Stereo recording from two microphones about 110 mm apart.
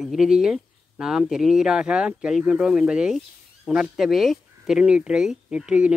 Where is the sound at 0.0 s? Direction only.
5° right (ahead or behind).